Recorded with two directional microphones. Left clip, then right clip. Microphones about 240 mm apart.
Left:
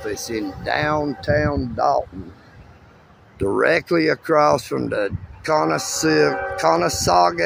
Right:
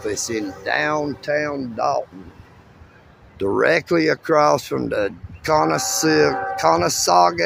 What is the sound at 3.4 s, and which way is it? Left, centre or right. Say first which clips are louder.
Speech: even; centre.